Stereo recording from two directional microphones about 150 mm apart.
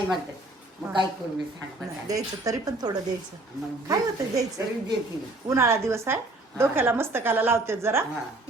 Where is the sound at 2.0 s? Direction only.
20° right (ahead or behind).